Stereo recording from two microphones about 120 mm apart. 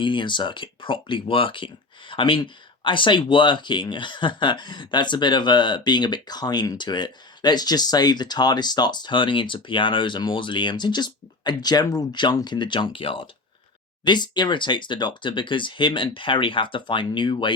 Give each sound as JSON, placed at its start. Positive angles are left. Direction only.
{"t": 0.0, "sound": "speech", "side_deg": 40}